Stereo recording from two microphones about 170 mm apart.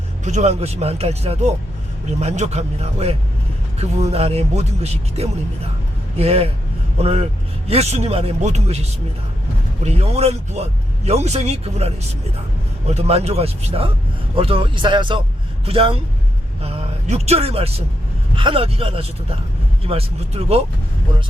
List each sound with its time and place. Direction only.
0.3 s speech: 40° right (ahead or behind)
12.9 s speech: 40° right (ahead or behind)